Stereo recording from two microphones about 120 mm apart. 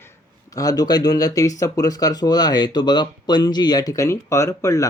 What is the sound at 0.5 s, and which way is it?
Speech, 30° left (ahead or behind).